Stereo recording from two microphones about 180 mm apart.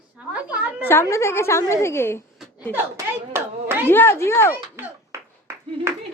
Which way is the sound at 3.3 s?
10° right (ahead or behind).